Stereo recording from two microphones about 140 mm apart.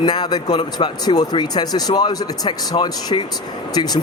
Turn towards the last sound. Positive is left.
turn(degrees=30)  # may be behind; listen again after turning